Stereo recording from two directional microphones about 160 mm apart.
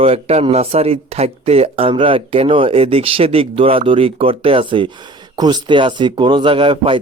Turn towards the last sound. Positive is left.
turn(degrees=-35)  # may be behind; listen again after turning